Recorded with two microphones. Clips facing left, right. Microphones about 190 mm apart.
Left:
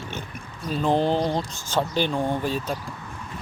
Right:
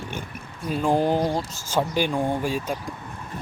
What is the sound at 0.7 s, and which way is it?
Speech, 10° right (ahead or behind).